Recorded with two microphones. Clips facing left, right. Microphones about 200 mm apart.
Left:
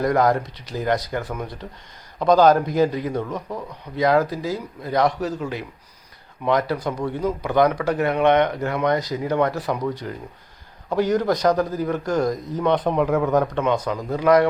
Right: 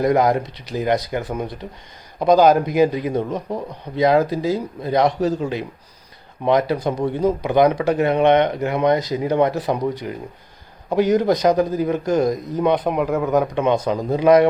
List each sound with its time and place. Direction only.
0.0 s speech: 20° right (ahead or behind)
13.7 s speech: 25° right (ahead or behind)